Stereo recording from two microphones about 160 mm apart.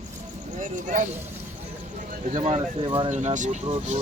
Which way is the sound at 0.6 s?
50° right (ahead or behind).